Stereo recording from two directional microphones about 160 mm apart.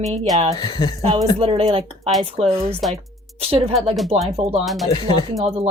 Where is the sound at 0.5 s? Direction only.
25° left (ahead or behind).